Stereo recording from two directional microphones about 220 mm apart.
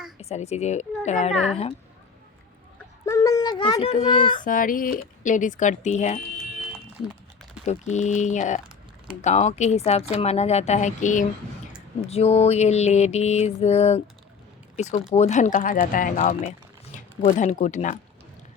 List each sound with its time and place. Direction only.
0.2 s speech: 30° left (ahead or behind)
3.1 s a child's voice: 15° left (ahead or behind)
4.4 s speech: 40° left (ahead or behind)
7.7 s speech: 30° left (ahead or behind)